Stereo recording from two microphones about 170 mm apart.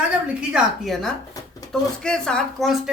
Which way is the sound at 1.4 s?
20° left (ahead or behind).